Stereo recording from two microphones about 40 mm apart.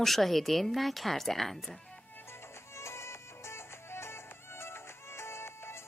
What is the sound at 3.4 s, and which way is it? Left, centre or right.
Music, left.